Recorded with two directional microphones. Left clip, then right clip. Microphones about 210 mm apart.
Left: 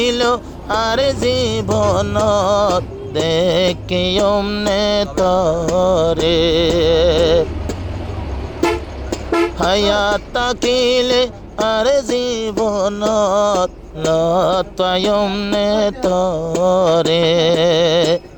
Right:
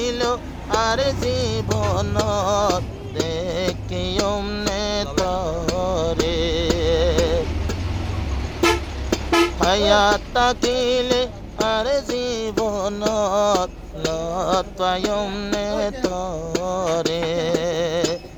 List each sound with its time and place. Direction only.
0.0 s music: 30° left (ahead or behind)
4.4 s music: 15° left (ahead or behind)
4.7 s music: 30° left (ahead or behind)
9.6 s music: 30° left (ahead or behind)
15.2 s music: 15° left (ahead or behind)
15.5 s music: 30° left (ahead or behind)